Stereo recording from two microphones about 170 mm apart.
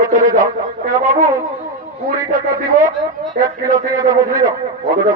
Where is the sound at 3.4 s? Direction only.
20° right (ahead or behind).